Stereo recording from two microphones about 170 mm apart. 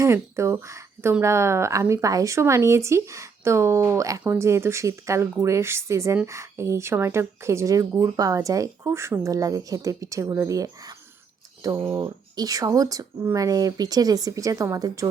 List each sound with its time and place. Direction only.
0.0 s speech: 15° right (ahead or behind)